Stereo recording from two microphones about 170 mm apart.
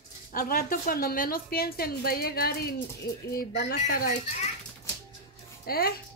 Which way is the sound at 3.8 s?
45° left (ahead or behind).